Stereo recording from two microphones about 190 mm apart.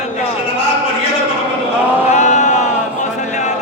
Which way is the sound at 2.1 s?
40° left (ahead or behind).